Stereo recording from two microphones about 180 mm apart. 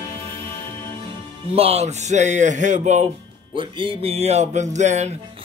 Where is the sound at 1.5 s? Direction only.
35° right (ahead or behind).